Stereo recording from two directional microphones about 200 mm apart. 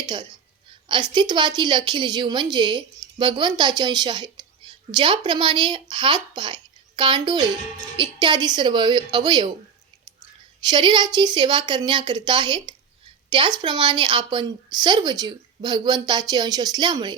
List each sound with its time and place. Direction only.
0.0 s a woman's voice: 20° right (ahead or behind)
10.7 s a woman's voice: 25° right (ahead or behind)